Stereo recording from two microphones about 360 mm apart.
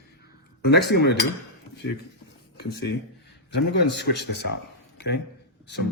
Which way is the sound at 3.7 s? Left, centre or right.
Left.